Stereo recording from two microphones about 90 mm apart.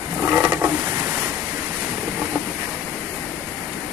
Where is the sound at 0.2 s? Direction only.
25° right (ahead or behind).